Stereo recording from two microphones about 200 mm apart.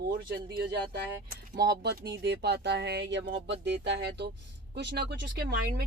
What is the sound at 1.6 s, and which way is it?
Speech, 55° right (ahead or behind).